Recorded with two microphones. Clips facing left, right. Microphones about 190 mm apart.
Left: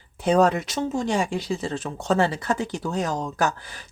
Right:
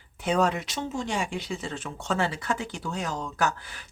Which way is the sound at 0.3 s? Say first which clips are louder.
Left 6 dB; 40° left (ahead or behind).